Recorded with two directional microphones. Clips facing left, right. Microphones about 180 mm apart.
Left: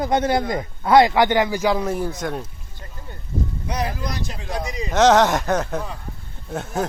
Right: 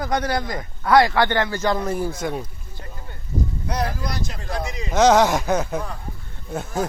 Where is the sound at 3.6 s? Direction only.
10° left (ahead or behind).